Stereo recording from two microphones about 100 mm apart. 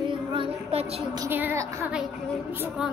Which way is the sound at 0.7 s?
85° right.